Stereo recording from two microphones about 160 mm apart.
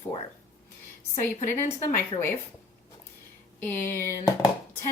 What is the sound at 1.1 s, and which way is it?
A woman's voice, 15° left (ahead or behind).